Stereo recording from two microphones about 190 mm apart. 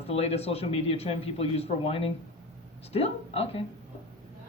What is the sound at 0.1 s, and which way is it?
Speech, 30° left (ahead or behind).